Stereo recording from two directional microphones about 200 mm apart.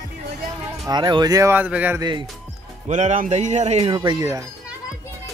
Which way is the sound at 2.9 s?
35° right (ahead or behind).